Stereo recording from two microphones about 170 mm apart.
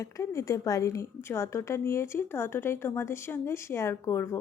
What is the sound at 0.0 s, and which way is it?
A woman's voice, 20° left (ahead or behind).